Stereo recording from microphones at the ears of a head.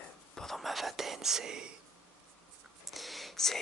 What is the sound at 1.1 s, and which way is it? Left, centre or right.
Speech, right.